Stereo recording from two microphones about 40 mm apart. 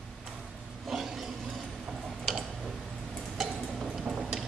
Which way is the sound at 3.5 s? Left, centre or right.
Centre.